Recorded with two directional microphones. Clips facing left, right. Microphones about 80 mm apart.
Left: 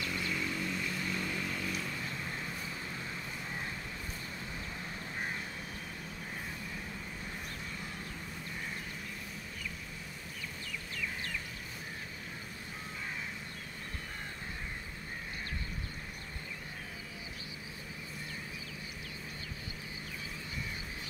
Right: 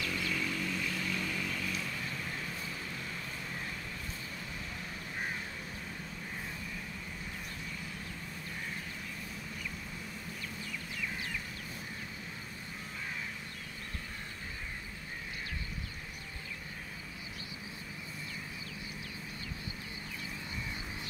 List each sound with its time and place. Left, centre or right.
0.0 s vehicle: left